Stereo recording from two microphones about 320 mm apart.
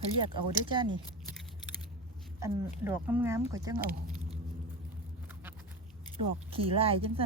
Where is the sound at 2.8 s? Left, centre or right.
Centre.